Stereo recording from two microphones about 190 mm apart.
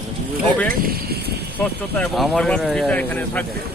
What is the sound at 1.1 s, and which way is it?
Vehicle, 55° right (ahead or behind).